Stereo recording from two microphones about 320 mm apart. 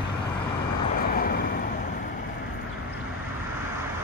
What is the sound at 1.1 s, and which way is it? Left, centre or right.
Vehicle, left.